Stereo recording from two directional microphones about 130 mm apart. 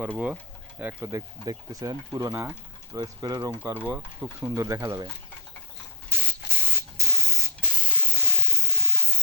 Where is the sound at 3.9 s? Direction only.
10° right (ahead or behind).